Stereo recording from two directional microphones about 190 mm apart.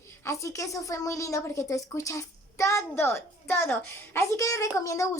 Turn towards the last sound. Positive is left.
turn(degrees=15)  # may be behind; listen again after turning